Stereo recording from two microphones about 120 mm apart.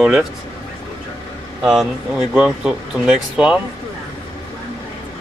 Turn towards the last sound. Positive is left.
turn(degrees=-5)  # may be behind; listen again after turning